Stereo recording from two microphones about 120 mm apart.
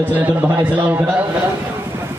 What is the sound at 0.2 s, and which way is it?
Speech, 15° right (ahead or behind).